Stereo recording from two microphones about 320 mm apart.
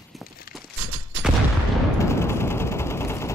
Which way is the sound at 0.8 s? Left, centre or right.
Right.